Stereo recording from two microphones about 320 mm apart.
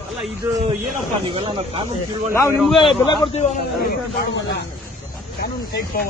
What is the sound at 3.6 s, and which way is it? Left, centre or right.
Speech, left.